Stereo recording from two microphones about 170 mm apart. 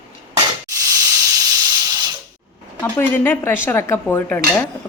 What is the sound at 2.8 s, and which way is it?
Speech, 10° left (ahead or behind).